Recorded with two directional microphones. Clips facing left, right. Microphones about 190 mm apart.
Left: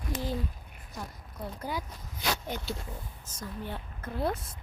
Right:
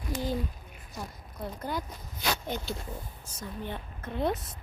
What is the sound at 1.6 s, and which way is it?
Speech, 10° left (ahead or behind).